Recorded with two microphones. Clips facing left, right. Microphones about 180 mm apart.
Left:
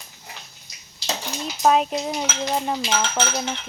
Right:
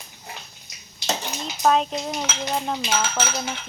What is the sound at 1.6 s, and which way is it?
Speech, 10° left (ahead or behind).